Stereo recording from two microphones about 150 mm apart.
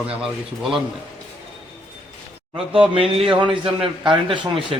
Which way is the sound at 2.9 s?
40° right (ahead or behind).